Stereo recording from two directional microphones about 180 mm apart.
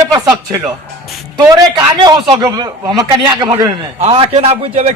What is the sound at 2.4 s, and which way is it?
A man's voice, 15° right (ahead or behind).